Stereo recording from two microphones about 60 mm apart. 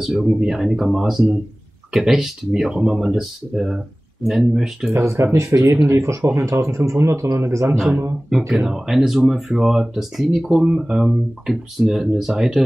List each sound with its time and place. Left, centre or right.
0.2 s speech: centre
4.9 s speech: right
8.3 s speech: centre